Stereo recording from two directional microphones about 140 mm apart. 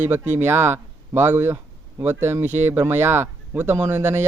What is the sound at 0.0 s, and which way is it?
A man's voice, 15° right (ahead or behind).